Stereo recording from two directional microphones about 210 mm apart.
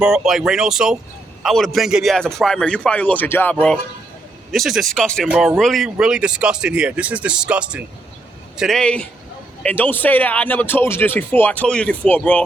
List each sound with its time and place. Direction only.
0.0 s a man's voice: centre (ahead or behind)